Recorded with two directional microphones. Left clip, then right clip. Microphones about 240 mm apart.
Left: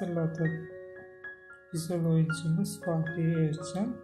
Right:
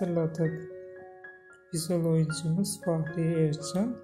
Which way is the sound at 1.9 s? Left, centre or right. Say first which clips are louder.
Right 3 dB; right.